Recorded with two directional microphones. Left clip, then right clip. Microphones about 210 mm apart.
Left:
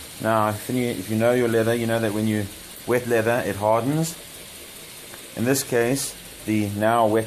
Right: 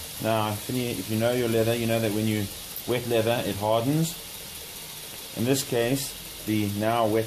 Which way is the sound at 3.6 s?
30° left (ahead or behind).